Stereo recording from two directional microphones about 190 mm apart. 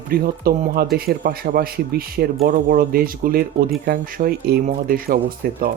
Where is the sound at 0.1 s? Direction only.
55° right (ahead or behind).